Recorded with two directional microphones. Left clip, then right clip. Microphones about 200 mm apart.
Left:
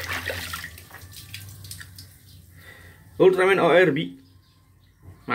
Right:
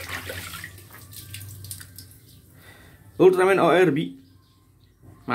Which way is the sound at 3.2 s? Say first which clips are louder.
Even; 15° right (ahead or behind).